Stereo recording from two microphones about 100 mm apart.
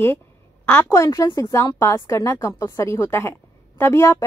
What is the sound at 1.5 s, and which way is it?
A woman's voice, 35° left (ahead or behind).